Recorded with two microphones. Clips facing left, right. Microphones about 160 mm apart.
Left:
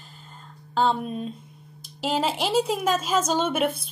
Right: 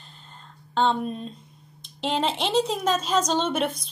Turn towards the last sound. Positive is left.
turn(degrees=10)  # may be behind; listen again after turning